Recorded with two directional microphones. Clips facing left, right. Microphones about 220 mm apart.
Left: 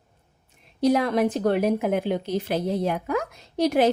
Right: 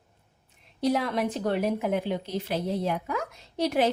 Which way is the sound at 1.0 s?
50° left (ahead or behind).